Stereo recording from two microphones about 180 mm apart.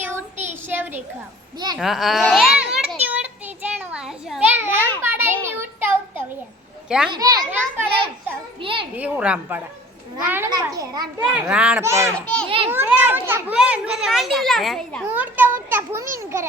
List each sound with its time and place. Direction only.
0.0 s child singing: 10° right (ahead or behind)
1.5 s a child's voice: 25° right (ahead or behind)
1.8 s a sound: centre (ahead or behind)
6.8 s a child's voice: 5° right (ahead or behind)
7.1 s a child's voice: 20° right (ahead or behind)
9.0 s a child's voice: 5° right (ahead or behind)
11.3 s a child's voice: 5° right (ahead or behind)
12.1 s a child's voice: 5° left (ahead or behind)
12.5 s a child's voice: 30° right (ahead or behind)
12.7 s a child's voice: 10° right (ahead or behind)
15.1 s a child's voice: 10° right (ahead or behind)